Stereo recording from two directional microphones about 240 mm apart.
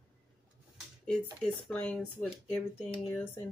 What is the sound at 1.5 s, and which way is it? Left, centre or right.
Speech, centre.